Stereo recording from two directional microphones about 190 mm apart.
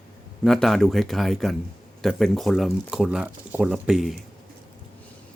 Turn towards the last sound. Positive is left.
turn(degrees=0)  # may be behind; listen again after turning